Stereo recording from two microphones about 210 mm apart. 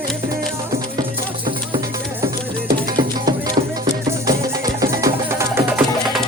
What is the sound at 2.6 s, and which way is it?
Music, 20° right (ahead or behind).